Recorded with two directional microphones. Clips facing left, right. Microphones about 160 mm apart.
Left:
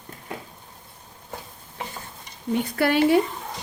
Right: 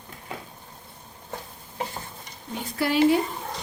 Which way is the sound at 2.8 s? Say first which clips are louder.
Left 3 dB; 65° left (ahead or behind).